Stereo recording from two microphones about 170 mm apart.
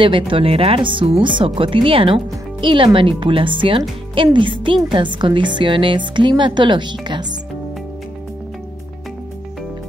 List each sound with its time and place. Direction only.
0.0 s a woman's voice: 30° right (ahead or behind)